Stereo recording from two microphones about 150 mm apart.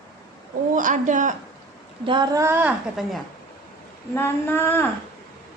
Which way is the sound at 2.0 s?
30° right (ahead or behind).